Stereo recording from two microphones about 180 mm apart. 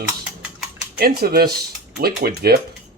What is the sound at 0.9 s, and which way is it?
Speech, 55° right (ahead or behind).